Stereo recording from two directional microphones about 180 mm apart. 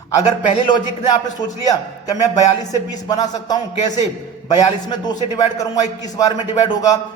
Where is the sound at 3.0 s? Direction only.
20° left (ahead or behind).